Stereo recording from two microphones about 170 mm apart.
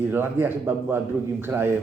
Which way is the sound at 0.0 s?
10° right (ahead or behind).